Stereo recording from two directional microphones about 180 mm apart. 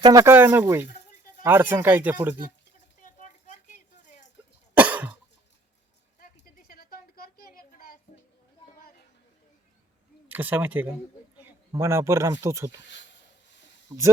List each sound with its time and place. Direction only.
0.0 s speech: 20° right (ahead or behind)
2.7 s a sound: 45° left (ahead or behind)
4.8 s cough: 10° right (ahead or behind)
6.1 s a sound: 50° left (ahead or behind)
10.2 s speech: 10° right (ahead or behind)
13.9 s speech: 20° right (ahead or behind)